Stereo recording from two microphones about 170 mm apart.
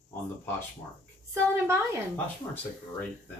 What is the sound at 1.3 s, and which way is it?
Speech, 15° right (ahead or behind).